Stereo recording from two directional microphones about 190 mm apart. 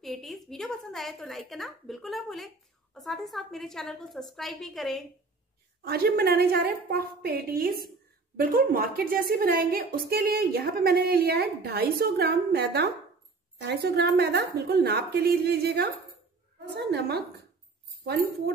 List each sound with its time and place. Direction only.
0.0 s a woman's voice: centre (ahead or behind)
5.8 s a woman's voice: 55° right (ahead or behind)